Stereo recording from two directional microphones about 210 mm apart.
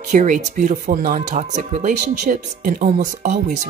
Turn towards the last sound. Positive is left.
turn(degrees=-35)  # may be behind; listen again after turning